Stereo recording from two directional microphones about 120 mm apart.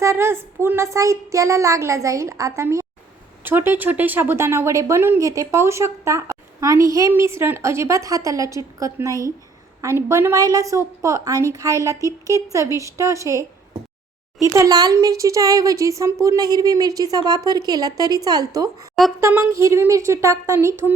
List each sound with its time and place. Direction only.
0.0 s speech: 20° right (ahead or behind)
14.4 s speech: 25° right (ahead or behind)
19.2 s speech: 20° right (ahead or behind)